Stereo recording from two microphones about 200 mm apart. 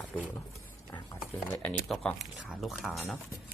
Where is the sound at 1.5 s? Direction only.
5° left (ahead or behind).